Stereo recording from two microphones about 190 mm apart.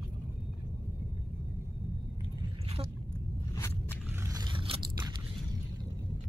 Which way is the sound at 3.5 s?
15° left (ahead or behind).